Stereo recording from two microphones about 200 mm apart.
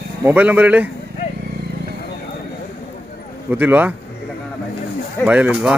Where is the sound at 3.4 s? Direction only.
10° right (ahead or behind).